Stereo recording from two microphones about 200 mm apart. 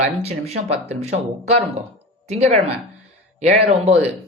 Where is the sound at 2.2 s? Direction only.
35° right (ahead or behind).